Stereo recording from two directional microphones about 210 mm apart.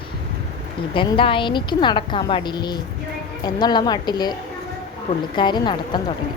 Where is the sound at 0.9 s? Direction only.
25° left (ahead or behind).